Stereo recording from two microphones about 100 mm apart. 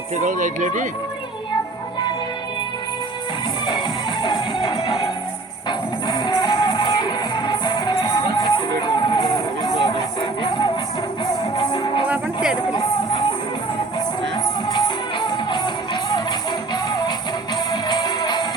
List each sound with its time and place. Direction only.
3.7 s music: 55° left (ahead or behind)
14.3 s music: 50° left (ahead or behind)